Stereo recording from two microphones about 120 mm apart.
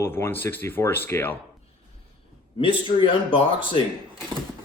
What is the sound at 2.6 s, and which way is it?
Speech, 45° left (ahead or behind).